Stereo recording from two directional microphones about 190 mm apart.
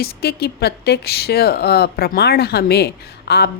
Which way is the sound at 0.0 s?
55° left (ahead or behind).